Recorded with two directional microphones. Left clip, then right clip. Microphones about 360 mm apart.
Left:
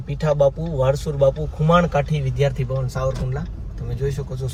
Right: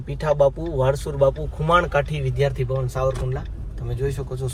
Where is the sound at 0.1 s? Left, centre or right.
Centre.